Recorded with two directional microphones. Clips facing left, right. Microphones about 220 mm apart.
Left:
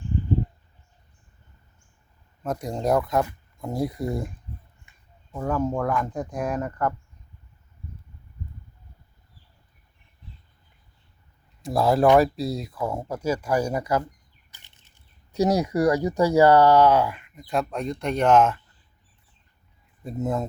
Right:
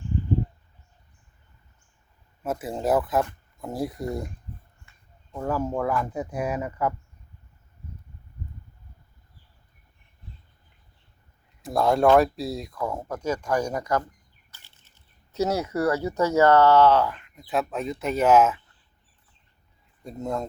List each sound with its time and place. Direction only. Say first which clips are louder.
2.4 s speech: left 1 dB; 5° right (ahead or behind)
4.9 s a sound: even; 15° left (ahead or behind)
5.5 s speech: left 1 dB; 5° right (ahead or behind)
11.6 s speech: left 1 dB; centre (ahead or behind)
20.1 s speech: left 3 dB; 5° left (ahead or behind)